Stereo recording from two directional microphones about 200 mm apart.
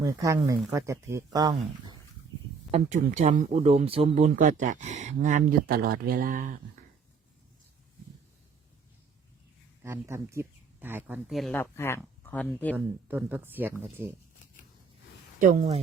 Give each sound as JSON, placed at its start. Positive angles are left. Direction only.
{"t": 0.0, "sound": "speech", "side_deg": -15}
{"t": 2.7, "sound": "speech", "side_deg": -35}
{"t": 9.8, "sound": "speech", "side_deg": -15}
{"t": 11.5, "sound": "speech", "side_deg": 10}
{"t": 12.7, "sound": "speech", "side_deg": -10}
{"t": 15.4, "sound": "speech", "side_deg": -40}